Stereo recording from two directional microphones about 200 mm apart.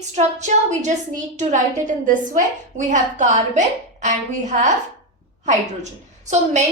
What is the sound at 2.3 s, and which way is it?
A woman's voice, 35° right (ahead or behind).